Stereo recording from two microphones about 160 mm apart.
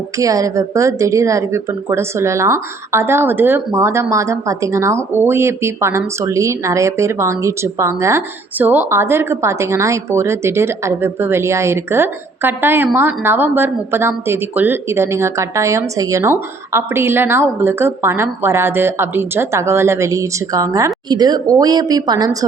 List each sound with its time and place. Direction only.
0.2 s speech: 20° right (ahead or behind)